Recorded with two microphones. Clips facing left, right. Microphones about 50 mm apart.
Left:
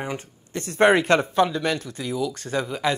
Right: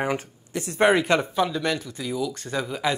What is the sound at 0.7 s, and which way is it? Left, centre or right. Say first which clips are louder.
Speech: left 2 dB; centre.